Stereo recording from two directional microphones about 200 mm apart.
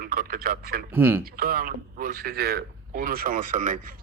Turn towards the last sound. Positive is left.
turn(degrees=-40)  # may be behind; listen again after turning